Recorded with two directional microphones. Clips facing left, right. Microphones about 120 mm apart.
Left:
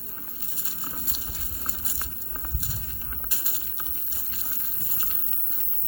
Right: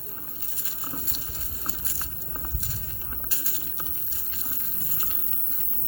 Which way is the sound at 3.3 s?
20° left (ahead or behind).